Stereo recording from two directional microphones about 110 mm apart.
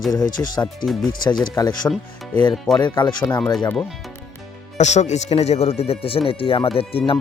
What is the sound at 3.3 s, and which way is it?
Speech, 30° left (ahead or behind).